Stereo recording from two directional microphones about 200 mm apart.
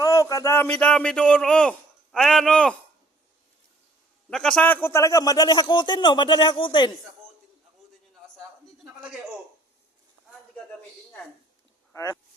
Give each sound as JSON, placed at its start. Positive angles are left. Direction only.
{"t": 0.0, "sound": "speech", "side_deg": 15}
{"t": 4.3, "sound": "a man's voice", "side_deg": 5}